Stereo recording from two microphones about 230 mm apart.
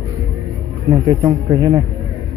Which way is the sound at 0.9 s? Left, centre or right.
Centre.